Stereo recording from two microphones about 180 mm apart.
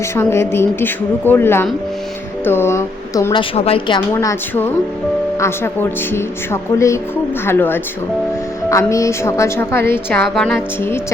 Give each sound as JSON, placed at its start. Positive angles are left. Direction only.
{"t": 0.2, "sound": "speech", "side_deg": 15}
{"t": 3.3, "sound": "a woman's voice", "side_deg": 30}
{"t": 4.1, "sound": "speech", "side_deg": 15}